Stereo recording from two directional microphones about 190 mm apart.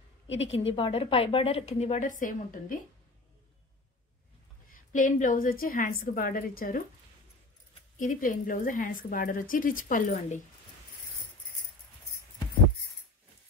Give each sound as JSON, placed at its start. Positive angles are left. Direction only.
{"t": 0.5, "sound": "a woman's voice", "side_deg": 30}
{"t": 4.7, "sound": "a woman's voice", "side_deg": 45}
{"t": 8.0, "sound": "a woman's voice", "side_deg": 45}